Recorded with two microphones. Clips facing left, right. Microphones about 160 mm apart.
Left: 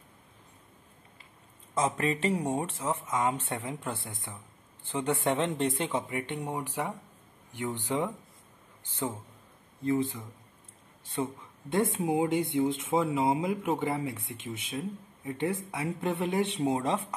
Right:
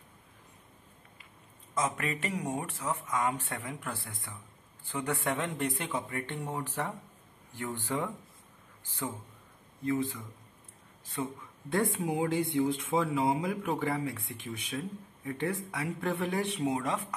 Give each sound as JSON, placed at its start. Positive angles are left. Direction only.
{"t": 1.8, "sound": "speech", "side_deg": 30}
{"t": 9.8, "sound": "speech", "side_deg": 25}
{"t": 11.7, "sound": "speech", "side_deg": 20}